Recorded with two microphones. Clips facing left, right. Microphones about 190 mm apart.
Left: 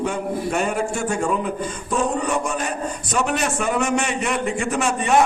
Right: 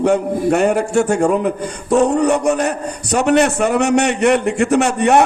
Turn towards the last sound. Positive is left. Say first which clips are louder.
# right 6 dB
turn(degrees=-70)  # may be behind; listen again after turning